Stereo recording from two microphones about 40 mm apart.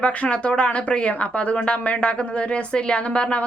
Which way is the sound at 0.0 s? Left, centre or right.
Left.